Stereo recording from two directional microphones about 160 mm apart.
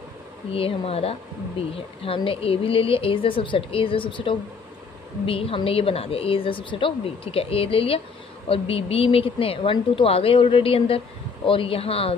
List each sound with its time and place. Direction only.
0.5 s a woman's voice: 35° left (ahead or behind)